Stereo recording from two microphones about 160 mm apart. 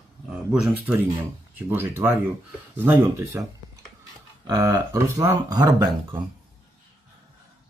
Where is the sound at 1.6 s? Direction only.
15° right (ahead or behind).